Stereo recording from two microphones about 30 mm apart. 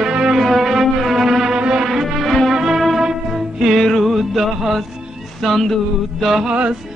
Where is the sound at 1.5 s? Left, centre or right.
Right.